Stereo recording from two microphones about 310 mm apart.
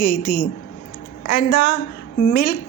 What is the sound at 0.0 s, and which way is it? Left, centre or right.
Speech, left.